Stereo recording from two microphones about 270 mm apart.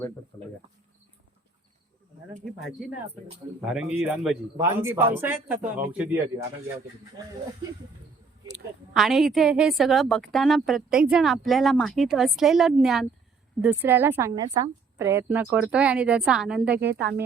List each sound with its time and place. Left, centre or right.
3.6 s a woman's voice: centre
8.9 s a woman's voice: centre
16.8 s speech: right